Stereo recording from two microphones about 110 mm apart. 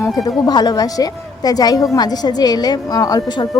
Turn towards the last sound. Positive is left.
turn(degrees=40)  # may be behind; listen again after turning